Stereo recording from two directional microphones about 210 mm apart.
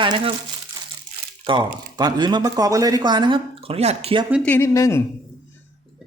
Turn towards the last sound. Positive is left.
turn(degrees=15)  # may be behind; listen again after turning